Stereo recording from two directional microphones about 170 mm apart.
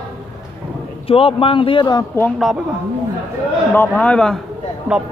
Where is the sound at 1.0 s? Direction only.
35° left (ahead or behind).